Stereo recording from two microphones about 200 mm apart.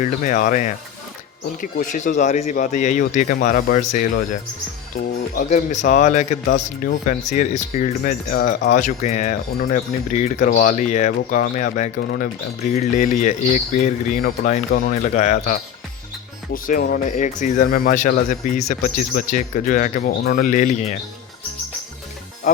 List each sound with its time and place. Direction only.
0.0 s speech: 40° left (ahead or behind)